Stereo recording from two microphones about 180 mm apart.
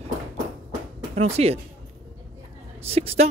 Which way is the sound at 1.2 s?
35° right (ahead or behind).